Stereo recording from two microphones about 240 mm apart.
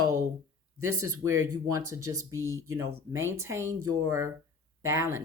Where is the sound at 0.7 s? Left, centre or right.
Right.